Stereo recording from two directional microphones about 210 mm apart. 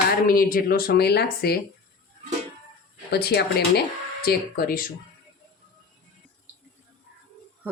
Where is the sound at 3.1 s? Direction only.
50° left (ahead or behind).